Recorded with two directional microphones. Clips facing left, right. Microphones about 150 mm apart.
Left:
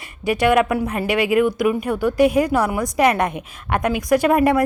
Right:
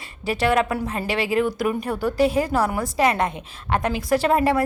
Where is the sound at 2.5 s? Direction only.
15° left (ahead or behind).